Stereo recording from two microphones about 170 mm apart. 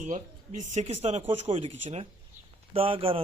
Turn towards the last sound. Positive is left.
turn(degrees=-35)  # may be behind; listen again after turning